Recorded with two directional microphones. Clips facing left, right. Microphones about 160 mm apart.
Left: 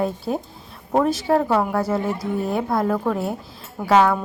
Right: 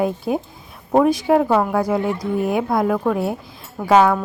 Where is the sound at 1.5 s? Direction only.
5° left (ahead or behind).